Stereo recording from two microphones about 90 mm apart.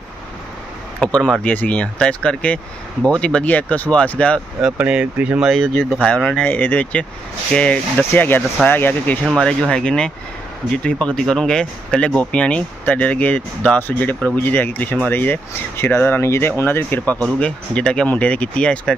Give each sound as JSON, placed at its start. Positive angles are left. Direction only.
{"t": 1.0, "sound": "speech", "side_deg": 10}
{"t": 4.7, "sound": "speech", "side_deg": -15}
{"t": 5.4, "sound": "speech", "side_deg": 5}
{"t": 6.4, "sound": "speech", "side_deg": 20}
{"t": 9.2, "sound": "speech", "side_deg": 5}